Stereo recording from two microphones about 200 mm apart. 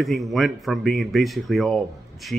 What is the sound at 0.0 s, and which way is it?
A man's voice, centre (ahead or behind).